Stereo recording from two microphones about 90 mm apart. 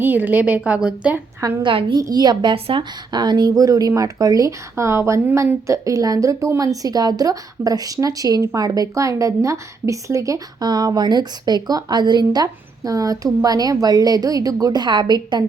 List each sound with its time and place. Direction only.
0.0 s a woman's voice: 20° right (ahead or behind)
1.6 s a woman's voice: 65° right (ahead or behind)
2.0 s a woman's voice: 45° right (ahead or behind)
4.7 s a woman's voice: 30° right (ahead or behind); by 15.4 s 55° right (ahead or behind)